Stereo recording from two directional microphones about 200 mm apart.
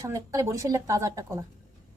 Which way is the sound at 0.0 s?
15° right (ahead or behind).